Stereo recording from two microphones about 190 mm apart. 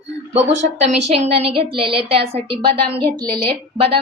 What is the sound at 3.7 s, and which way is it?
Speech, 30° right (ahead or behind).